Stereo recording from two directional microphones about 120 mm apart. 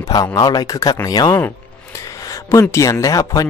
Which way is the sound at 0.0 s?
30° left (ahead or behind).